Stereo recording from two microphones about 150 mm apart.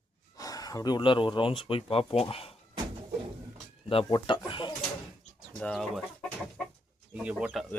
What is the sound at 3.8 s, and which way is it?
Speech, 35° left (ahead or behind).